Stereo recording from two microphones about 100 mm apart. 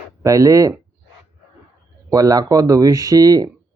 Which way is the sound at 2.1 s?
35° right (ahead or behind).